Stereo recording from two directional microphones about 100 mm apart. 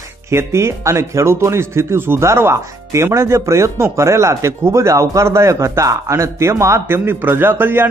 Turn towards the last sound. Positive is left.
turn(degrees=-20)  # may be behind; listen again after turning